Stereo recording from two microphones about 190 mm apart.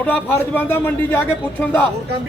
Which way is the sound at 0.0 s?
10° left (ahead or behind).